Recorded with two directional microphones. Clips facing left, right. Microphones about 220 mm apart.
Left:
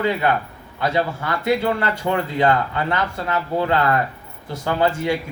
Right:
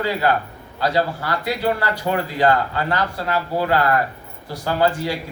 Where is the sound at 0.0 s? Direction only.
20° left (ahead or behind).